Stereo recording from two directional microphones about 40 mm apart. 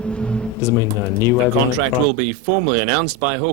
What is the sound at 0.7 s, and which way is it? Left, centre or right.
Speech, left.